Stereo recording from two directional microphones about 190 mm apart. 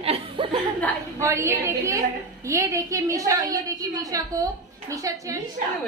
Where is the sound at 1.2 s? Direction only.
15° right (ahead or behind).